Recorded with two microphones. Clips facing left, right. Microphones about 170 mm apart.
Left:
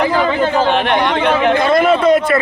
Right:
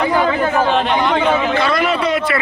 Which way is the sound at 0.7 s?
65° left (ahead or behind).